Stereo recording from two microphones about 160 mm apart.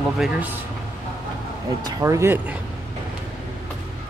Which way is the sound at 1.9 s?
20° right (ahead or behind).